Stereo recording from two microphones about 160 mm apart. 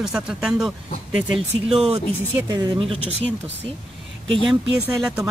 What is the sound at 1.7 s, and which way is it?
Speech, 40° right (ahead or behind).